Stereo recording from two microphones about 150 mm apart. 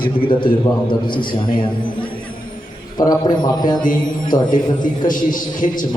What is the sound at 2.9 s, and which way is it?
Speech, 25° left (ahead or behind).